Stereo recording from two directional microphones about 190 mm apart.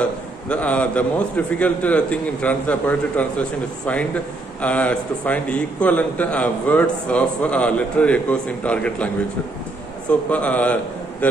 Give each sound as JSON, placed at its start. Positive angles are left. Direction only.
{"t": 0.0, "sound": "a man's voice", "side_deg": 5}